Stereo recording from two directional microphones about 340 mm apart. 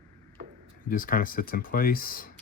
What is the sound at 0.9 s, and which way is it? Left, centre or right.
Speech, left.